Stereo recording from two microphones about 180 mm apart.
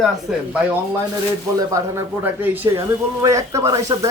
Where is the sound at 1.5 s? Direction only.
15° right (ahead or behind).